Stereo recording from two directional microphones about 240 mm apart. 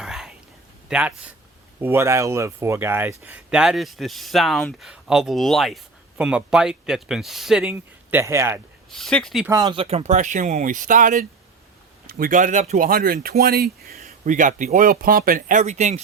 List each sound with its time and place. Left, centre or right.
0.0 s whispering: centre
0.9 s speech: centre
8.9 s speech: centre
9.5 s speech: centre